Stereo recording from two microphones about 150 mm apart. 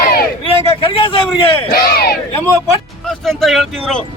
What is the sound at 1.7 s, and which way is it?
Speech, 90° left.